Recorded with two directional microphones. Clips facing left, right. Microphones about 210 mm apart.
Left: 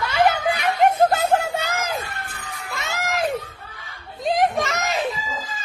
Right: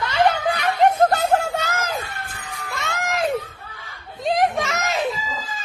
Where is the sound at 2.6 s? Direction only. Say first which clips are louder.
Right 1 dB; centre (ahead or behind).